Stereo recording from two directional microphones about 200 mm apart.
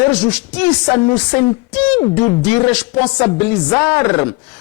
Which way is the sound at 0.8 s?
15° left (ahead or behind).